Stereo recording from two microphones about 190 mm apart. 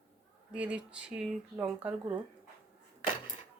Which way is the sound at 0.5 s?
5° right (ahead or behind).